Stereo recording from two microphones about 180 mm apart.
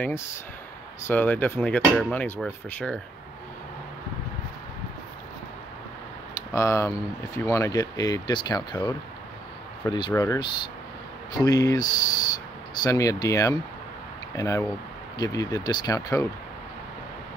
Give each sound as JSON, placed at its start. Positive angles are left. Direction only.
{"t": 0.0, "sound": "speech", "side_deg": 15}
{"t": 6.5, "sound": "speech", "side_deg": 15}